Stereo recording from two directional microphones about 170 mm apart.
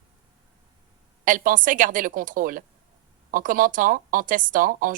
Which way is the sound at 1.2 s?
50° right (ahead or behind).